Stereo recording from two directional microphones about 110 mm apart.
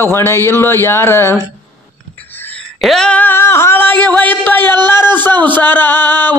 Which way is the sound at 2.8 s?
5° left (ahead or behind).